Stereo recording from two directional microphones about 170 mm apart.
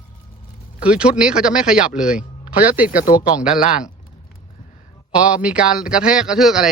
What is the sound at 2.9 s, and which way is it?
Speech, 55° left (ahead or behind).